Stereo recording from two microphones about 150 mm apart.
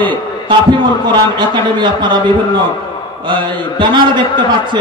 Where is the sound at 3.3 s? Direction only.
30° right (ahead or behind).